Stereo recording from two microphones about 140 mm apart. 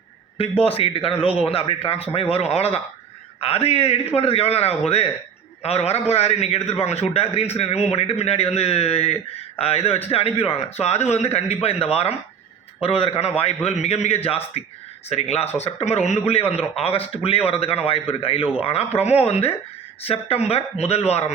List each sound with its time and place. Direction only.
0.6 s a man's voice: 45° left (ahead or behind)